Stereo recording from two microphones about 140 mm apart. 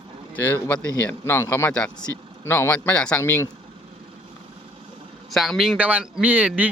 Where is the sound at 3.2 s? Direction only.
20° left (ahead or behind).